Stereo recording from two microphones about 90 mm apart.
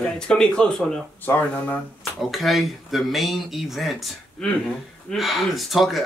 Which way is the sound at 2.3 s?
Centre (ahead or behind).